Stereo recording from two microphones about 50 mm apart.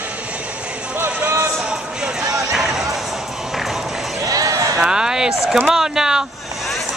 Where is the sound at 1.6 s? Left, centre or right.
Centre.